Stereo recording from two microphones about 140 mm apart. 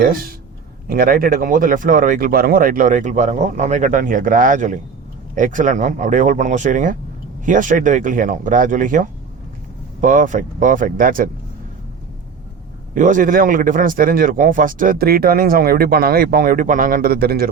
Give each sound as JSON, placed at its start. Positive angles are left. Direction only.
{"t": 0.0, "sound": "speech", "side_deg": -90}
{"t": 12.9, "sound": "speech", "side_deg": -65}